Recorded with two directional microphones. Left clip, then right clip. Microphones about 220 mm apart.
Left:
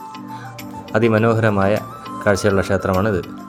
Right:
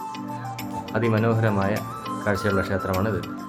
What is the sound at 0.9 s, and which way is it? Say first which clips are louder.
Speech: left 8 dB; 30° left (ahead or behind).